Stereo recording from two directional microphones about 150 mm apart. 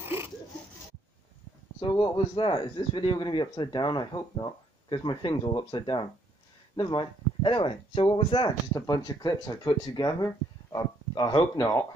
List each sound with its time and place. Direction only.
2.0 s a man's voice: 35° left (ahead or behind)